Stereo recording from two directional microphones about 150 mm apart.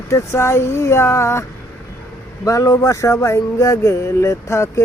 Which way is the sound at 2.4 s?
20° left (ahead or behind).